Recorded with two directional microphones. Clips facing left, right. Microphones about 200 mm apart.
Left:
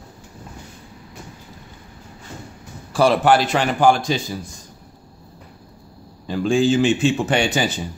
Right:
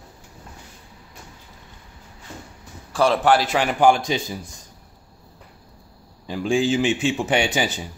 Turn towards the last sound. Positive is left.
turn(degrees=-10)  # may be behind; listen again after turning